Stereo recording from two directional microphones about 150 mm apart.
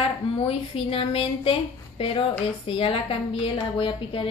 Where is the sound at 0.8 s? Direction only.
40° left (ahead or behind).